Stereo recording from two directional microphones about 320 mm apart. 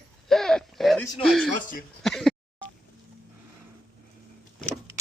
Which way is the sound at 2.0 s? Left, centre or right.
Centre.